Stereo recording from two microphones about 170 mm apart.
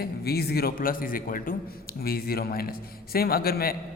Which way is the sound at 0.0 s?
65° left (ahead or behind).